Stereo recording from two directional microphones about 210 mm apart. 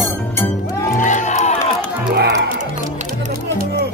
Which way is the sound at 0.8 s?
40° left (ahead or behind).